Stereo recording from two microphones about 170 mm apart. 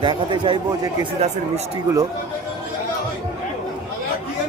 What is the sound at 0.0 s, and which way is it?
Speech, 30° right (ahead or behind).